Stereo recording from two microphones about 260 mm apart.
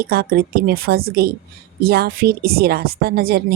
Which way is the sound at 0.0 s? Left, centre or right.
Right.